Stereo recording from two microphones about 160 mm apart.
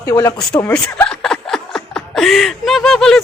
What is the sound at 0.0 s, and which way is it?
Speech, 20° left (ahead or behind).